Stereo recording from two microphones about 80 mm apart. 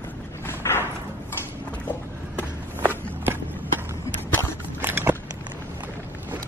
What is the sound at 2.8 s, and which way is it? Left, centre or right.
Walk, right.